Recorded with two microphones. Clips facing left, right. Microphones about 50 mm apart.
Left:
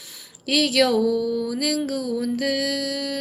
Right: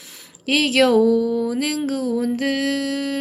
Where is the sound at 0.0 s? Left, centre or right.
Right.